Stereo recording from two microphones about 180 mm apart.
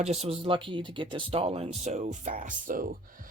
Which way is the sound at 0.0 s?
35° right (ahead or behind).